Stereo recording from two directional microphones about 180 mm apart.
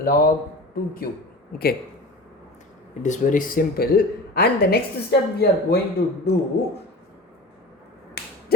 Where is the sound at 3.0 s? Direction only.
45° left (ahead or behind); by 5.8 s 65° left (ahead or behind).